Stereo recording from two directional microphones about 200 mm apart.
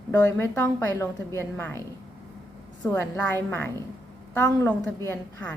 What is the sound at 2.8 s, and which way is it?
A woman's voice, 10° left (ahead or behind).